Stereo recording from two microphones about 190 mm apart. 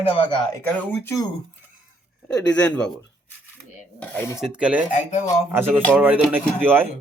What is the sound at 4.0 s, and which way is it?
Dishes, 10° left (ahead or behind).